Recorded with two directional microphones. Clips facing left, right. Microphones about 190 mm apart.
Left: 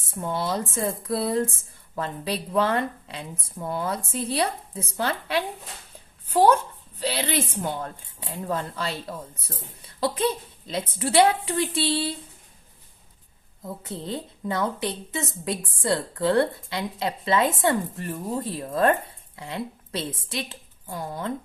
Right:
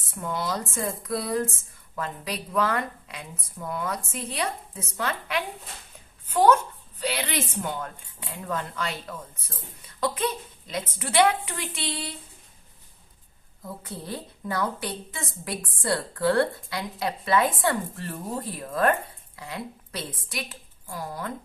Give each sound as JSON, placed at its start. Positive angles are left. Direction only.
{"t": 0.1, "sound": "a woman's voice", "side_deg": 30}
{"t": 13.8, "sound": "a woman's voice", "side_deg": 20}